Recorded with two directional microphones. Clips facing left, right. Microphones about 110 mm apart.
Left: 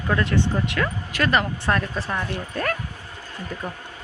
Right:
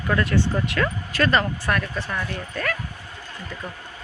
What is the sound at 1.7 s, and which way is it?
Speech, 30° left (ahead or behind).